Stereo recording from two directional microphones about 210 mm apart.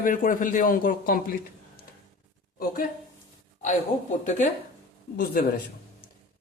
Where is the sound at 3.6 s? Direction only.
35° left (ahead or behind).